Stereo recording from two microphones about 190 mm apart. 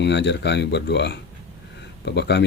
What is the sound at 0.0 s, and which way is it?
Speech, 65° left (ahead or behind).